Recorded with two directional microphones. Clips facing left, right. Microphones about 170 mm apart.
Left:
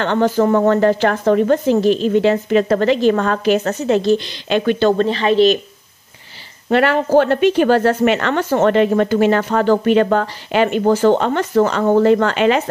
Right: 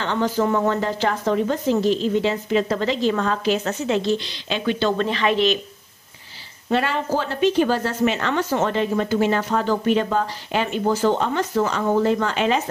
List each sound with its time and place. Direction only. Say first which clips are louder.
0.0 s speech: left 6 dB; 60° left (ahead or behind)
5.0 s speech: left 6 dB; 30° left (ahead or behind)
6.7 s a woman's voice: left 8 dB; 70° left (ahead or behind)